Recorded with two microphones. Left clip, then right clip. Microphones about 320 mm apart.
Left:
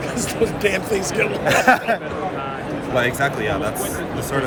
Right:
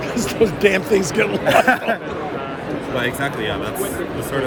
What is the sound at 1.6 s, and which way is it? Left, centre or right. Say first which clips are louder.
Speech: left 1 dB; centre.